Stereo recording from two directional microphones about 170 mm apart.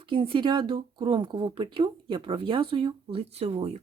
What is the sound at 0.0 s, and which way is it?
Speech, 30° right (ahead or behind).